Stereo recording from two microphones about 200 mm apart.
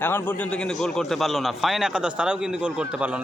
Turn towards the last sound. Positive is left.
turn(degrees=-5)  # may be behind; listen again after turning